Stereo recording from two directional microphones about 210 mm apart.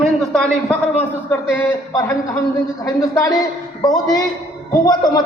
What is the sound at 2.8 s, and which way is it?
Speech, 15° left (ahead or behind).